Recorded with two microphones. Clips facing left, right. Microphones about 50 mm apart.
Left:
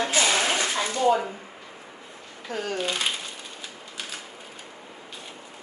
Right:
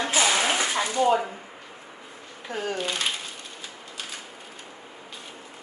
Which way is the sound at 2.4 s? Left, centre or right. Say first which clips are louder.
Even; centre.